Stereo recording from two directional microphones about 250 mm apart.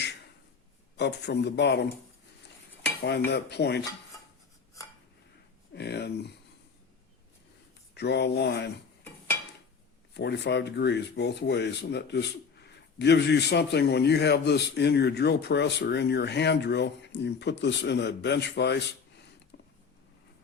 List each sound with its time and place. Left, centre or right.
0.9 s speech: left
3.2 s speech: left
5.7 s speech: left
7.9 s speech: left
10.2 s speech: left